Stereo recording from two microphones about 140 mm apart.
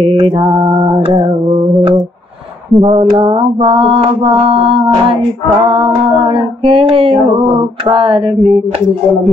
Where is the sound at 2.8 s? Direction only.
40° right (ahead or behind).